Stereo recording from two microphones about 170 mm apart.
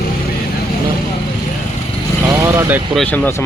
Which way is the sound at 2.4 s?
15° right (ahead or behind).